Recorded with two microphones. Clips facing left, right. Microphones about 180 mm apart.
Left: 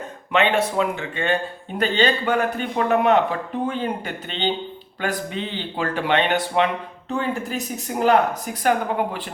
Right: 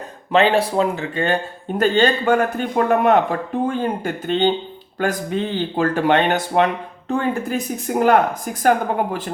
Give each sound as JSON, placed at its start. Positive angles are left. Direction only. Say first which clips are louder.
{"t": 0.3, "sound": "a man's voice", "louder": "right 4 dB", "side_deg": -35}